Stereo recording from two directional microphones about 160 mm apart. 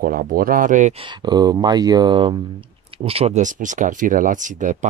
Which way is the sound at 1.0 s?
25° right (ahead or behind).